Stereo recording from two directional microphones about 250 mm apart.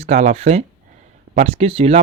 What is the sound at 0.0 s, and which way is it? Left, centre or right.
Speech, right.